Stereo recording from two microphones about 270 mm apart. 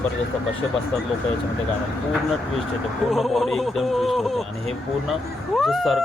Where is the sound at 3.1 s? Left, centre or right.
Centre.